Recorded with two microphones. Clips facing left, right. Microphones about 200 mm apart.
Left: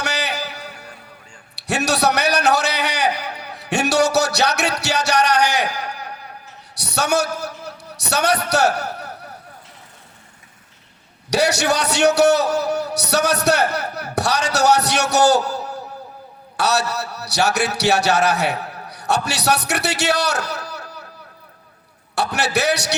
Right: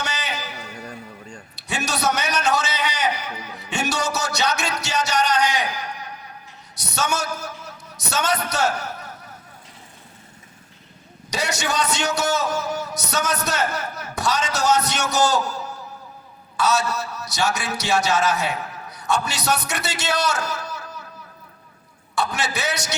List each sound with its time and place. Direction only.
0.0 s music: 70° left (ahead or behind)
1.5 s a sound: 70° left (ahead or behind)
11.3 s a man's voice: 70° left (ahead or behind)
22.1 s a man's voice: 70° left (ahead or behind)